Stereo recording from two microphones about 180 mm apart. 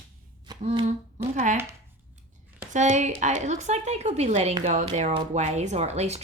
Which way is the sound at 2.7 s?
40° right (ahead or behind).